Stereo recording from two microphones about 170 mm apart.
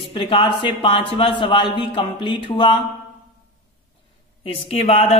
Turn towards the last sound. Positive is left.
turn(degrees=35)  # may be behind; listen again after turning